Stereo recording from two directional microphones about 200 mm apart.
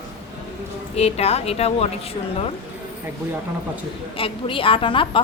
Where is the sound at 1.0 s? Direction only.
30° left (ahead or behind).